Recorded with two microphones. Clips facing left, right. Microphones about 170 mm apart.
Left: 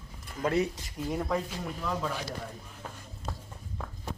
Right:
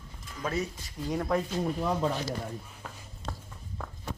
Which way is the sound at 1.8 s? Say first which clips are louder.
Right 2 dB; 30° right (ahead or behind).